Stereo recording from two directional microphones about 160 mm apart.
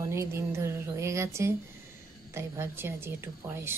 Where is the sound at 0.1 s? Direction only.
15° right (ahead or behind).